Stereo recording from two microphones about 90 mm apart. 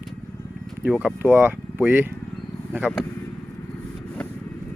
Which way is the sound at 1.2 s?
25° right (ahead or behind).